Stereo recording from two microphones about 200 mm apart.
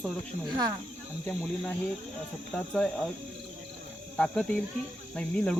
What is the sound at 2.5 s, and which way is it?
Speech, 5° left (ahead or behind).